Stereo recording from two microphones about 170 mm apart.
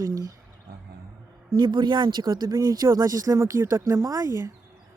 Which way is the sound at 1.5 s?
25° right (ahead or behind).